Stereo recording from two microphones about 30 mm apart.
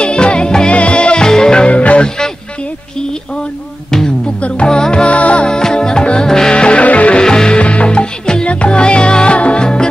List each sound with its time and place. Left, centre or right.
0.0 s music: left
0.7 s music: left
1.2 s music: left
1.7 s music: left
2.0 s music: left
4.4 s music: left
4.6 s music: left
5.0 s music: left
5.5 s music: left
6.5 s music: left
6.8 s music: left
7.2 s music: left
7.5 s music: left
8.5 s music: left